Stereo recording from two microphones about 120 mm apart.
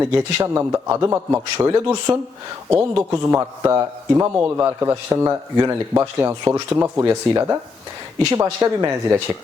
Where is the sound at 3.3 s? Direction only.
25° right (ahead or behind).